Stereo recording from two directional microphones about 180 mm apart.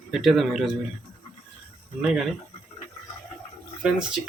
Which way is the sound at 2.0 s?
5° right (ahead or behind).